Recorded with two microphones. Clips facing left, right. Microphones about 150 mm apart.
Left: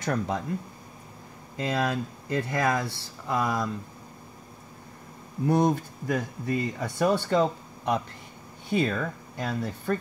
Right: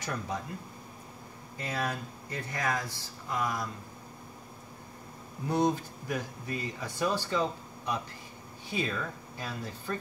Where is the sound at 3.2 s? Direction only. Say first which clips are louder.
Left 6 dB; 90° left.